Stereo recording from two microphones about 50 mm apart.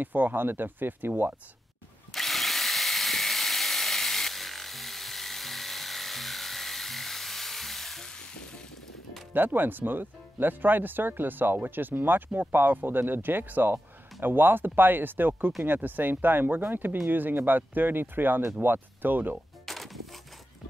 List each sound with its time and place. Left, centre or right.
0.0 s speech: right
2.1 s drill: centre
9.3 s speech: right
19.6 s music: centre